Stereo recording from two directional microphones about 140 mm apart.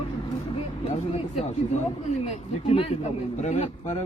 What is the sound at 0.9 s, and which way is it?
Speech, 50° left (ahead or behind).